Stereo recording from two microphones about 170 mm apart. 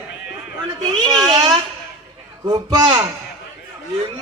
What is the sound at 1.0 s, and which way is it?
Speech, 25° right (ahead or behind).